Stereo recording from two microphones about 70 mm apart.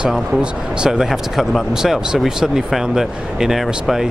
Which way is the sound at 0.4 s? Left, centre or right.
Centre.